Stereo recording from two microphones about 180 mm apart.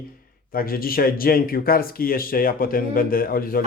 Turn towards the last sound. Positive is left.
turn(degrees=55)  # may be behind; listen again after turning